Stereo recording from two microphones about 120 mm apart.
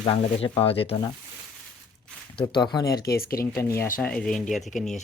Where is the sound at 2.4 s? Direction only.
35° left (ahead or behind).